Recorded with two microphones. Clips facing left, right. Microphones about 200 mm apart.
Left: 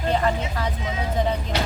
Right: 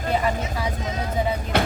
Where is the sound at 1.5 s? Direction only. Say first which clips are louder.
Right 7 dB; 55° right (ahead or behind).